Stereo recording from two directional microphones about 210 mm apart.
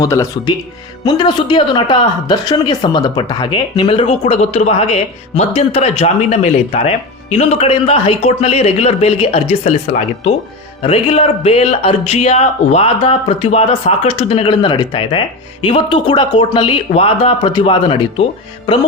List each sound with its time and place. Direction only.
0.0 s speech: 15° left (ahead or behind)
10.8 s speech: 30° left (ahead or behind)